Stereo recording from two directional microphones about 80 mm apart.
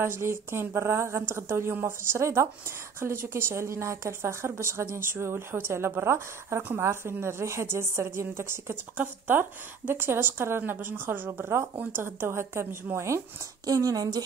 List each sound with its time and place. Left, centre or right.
0.0 s speech: right
13.7 s speech: right